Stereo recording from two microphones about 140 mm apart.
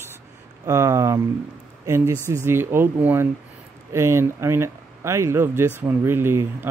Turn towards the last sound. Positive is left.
turn(degrees=-15)  # may be behind; listen again after turning